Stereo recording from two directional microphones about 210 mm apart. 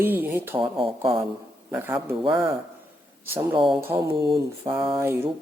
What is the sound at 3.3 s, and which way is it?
Speech, 5° right (ahead or behind).